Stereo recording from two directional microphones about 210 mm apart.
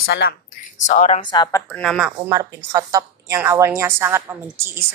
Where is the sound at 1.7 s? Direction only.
Centre (ahead or behind).